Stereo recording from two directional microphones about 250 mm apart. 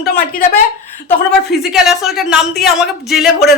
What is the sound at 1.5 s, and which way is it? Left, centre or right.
Speech, centre.